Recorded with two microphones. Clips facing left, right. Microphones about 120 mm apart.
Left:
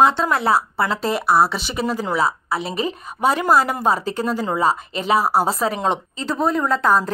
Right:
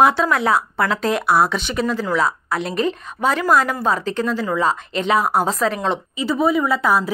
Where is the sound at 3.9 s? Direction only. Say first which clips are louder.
Right 1 dB; 40° left (ahead or behind).